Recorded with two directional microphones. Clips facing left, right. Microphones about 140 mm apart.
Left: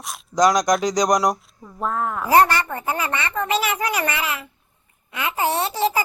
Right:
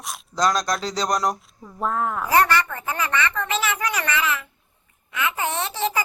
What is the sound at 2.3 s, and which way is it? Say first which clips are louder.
Speech: left 3 dB; 30° left (ahead or behind).